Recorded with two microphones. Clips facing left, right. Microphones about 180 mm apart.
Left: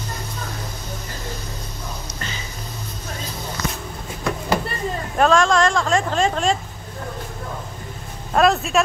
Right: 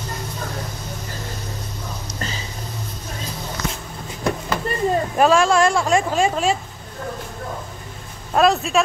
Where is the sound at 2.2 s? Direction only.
40° right (ahead or behind).